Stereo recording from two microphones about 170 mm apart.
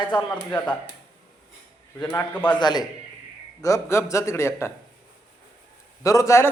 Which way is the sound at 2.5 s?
25° left (ahead or behind).